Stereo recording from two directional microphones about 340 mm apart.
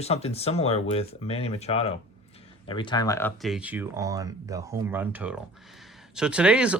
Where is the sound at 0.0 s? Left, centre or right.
Centre.